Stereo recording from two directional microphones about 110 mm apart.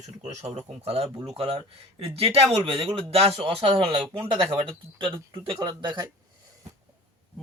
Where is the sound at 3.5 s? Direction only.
50° right (ahead or behind).